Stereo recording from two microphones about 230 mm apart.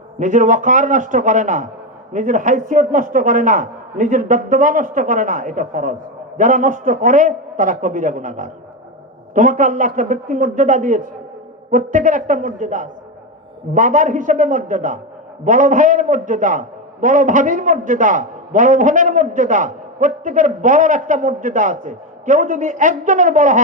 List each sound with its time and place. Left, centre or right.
0.2 s a man's voice: right